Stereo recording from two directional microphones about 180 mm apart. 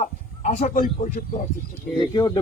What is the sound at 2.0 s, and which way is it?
Speech, 25° left (ahead or behind).